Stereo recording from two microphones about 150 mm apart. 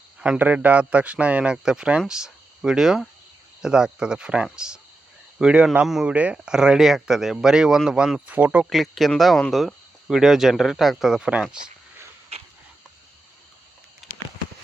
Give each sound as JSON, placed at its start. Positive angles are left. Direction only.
{"t": 0.2, "sound": "a man's voice", "side_deg": -10}
{"t": 8.7, "sound": "speech", "side_deg": 0}
{"t": 12.3, "sound": "a sound", "side_deg": -45}